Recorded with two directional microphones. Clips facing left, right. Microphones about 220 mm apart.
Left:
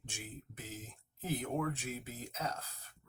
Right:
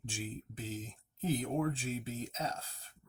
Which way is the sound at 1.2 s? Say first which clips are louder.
Right 3 dB; 30° right (ahead or behind).